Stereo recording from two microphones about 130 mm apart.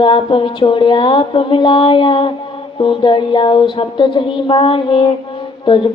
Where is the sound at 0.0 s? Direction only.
40° left (ahead or behind).